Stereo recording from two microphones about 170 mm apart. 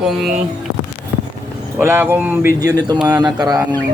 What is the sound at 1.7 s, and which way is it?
Speech, 10° right (ahead or behind).